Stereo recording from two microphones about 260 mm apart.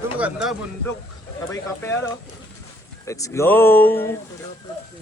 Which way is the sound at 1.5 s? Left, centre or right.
Centre.